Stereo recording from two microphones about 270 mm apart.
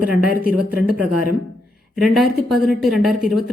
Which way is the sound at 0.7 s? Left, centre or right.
Left.